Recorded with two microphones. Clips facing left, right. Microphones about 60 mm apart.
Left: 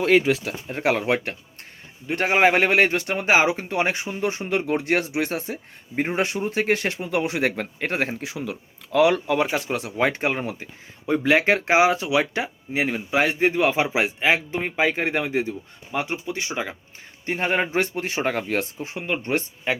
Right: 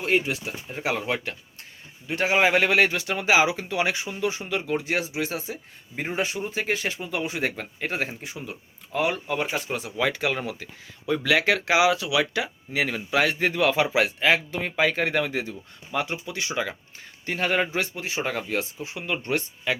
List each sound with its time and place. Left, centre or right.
0.4 s speech: left
8.2 s speech: left
17.7 s speech: left
18.9 s speech: left